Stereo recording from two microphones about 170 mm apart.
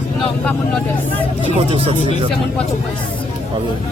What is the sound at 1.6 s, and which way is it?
Speech, 35° right (ahead or behind).